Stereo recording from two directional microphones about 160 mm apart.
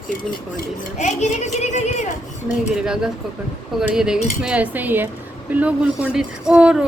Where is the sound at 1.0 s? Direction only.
50° left (ahead or behind).